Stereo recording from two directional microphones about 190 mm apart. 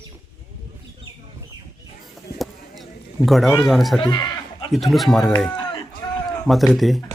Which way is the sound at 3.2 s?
Centre (ahead or behind).